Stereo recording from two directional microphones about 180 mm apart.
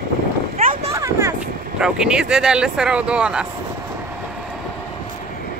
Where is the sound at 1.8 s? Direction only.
5° right (ahead or behind).